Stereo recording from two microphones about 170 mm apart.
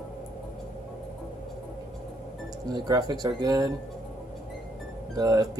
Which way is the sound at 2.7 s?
25° right (ahead or behind).